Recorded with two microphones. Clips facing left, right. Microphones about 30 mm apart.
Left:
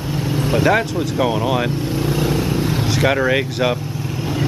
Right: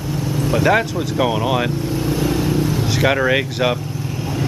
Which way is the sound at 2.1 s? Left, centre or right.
Left.